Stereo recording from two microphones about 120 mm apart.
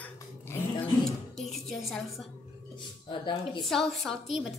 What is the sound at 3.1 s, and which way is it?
Speech, 40° left (ahead or behind).